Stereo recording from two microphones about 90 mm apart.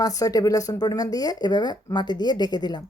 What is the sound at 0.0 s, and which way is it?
Speech, 40° left (ahead or behind).